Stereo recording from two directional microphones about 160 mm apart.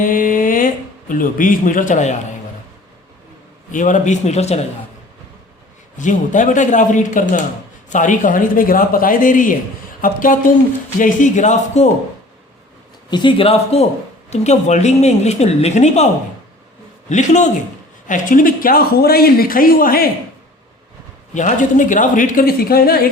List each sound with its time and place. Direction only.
0.0 s speech: 60° left (ahead or behind)
3.7 s a woman's voice: 50° left (ahead or behind)
6.0 s a woman's voice: 50° left (ahead or behind)
13.1 s a woman's voice: 30° left (ahead or behind); by 16.0 s 45° left (ahead or behind)
17.1 s a woman's voice: 50° left (ahead or behind); by 20.1 s 65° left (ahead or behind)
21.3 s speech: 55° left (ahead or behind); by 23.0 s 70° left (ahead or behind)